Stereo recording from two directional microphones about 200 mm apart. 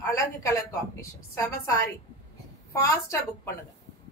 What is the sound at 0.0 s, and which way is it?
A woman's voice, 15° left (ahead or behind).